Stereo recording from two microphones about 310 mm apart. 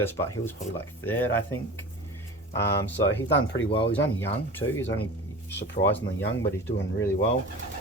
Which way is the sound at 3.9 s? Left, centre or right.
Centre.